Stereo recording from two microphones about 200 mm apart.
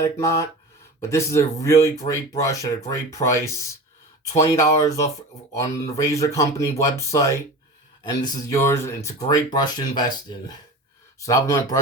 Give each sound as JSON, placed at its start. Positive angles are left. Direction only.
{"t": 0.0, "sound": "speech", "side_deg": 15}